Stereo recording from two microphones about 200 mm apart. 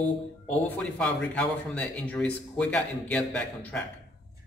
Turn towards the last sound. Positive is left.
turn(degrees=10)  # may be behind; listen again after turning